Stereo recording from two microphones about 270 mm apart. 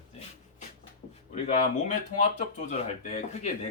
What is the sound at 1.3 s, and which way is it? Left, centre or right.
Speech, left.